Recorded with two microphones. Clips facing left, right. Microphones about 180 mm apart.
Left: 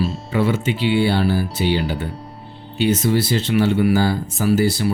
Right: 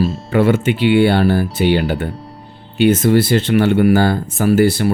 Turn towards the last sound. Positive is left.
turn(degrees=-60)  # may be behind; listen again after turning